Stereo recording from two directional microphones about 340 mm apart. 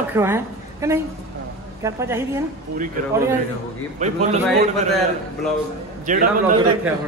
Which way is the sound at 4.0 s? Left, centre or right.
Centre.